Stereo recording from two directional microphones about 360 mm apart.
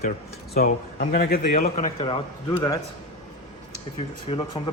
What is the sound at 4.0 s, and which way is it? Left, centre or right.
Speech, centre.